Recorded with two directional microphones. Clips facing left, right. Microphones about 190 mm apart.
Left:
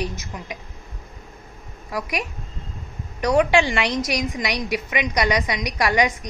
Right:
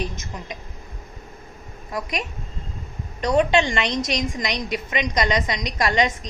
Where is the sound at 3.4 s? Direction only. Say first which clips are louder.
Left 1 dB; 10° left (ahead or behind).